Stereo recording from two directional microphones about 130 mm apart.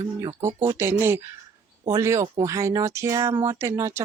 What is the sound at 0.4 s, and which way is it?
Speech, 20° right (ahead or behind).